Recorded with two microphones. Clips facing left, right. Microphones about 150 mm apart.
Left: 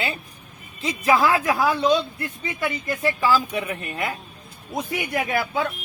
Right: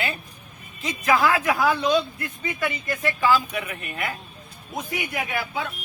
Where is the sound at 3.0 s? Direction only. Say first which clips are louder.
Left 1 dB; 35° left (ahead or behind).